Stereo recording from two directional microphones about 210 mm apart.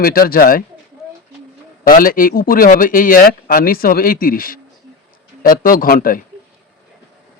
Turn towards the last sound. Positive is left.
turn(degrees=40)  # may be behind; listen again after turning